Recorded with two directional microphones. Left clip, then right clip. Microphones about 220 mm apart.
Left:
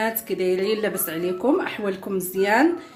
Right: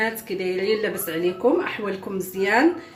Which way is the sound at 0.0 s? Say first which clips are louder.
Left 1 dB; 55° left (ahead or behind).